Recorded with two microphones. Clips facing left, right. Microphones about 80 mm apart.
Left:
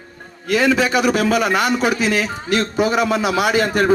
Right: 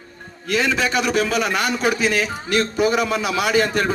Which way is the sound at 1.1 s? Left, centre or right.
Left.